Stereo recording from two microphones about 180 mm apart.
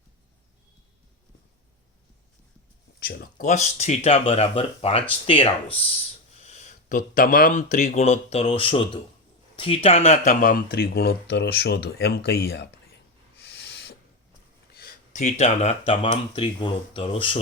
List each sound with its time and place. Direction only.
3.0 s speech: 55° left (ahead or behind)
13.4 s owl: 70° left (ahead or behind)
14.7 s speech: 55° left (ahead or behind); by 17.4 s 30° left (ahead or behind)